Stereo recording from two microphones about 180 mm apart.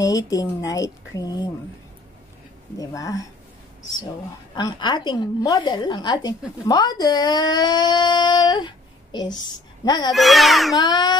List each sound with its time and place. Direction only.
0.0 s speech: 20° left (ahead or behind)
2.8 s speech: 20° left (ahead or behind)
4.6 s speech: 25° left (ahead or behind)
10.1 s a child's voice: centre (ahead or behind)
10.8 s speech: 25° left (ahead or behind)